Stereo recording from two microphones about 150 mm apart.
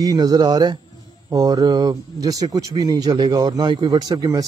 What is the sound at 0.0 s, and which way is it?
Speech, 25° right (ahead or behind).